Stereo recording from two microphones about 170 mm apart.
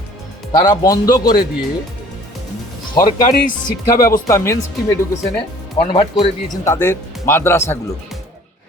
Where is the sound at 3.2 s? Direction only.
50° left (ahead or behind).